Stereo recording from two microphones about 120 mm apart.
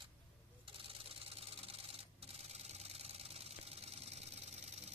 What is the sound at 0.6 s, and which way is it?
Rub, 50° right (ahead or behind).